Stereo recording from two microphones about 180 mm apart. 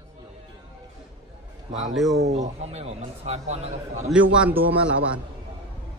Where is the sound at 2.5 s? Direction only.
35° right (ahead or behind).